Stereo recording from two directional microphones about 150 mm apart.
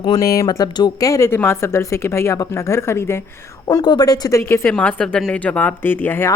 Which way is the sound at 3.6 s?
30° left (ahead or behind).